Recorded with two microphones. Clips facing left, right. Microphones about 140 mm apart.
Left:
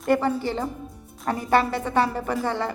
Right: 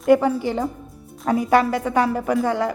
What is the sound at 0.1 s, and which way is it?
A woman's voice, 10° right (ahead or behind).